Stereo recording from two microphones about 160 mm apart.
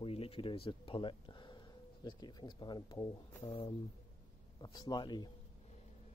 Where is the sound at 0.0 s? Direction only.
35° left (ahead or behind).